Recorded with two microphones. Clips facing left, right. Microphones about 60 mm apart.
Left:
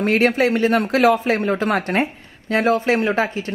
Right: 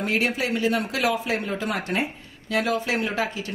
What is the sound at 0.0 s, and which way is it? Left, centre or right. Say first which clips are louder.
A woman's voice: left 8 dB; left.